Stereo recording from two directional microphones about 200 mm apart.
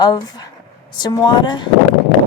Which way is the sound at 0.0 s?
20° left (ahead or behind).